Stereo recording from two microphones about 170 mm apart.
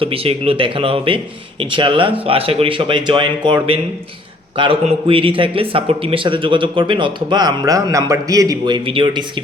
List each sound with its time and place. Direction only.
0.0 s a man's voice: 35° right (ahead or behind)